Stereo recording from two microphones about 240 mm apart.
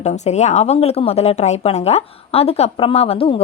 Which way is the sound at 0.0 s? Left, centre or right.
Left.